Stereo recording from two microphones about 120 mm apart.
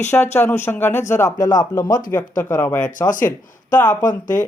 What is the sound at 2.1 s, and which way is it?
Speech, 20° left (ahead or behind).